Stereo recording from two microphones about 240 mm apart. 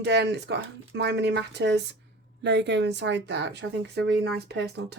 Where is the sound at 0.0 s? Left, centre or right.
Right.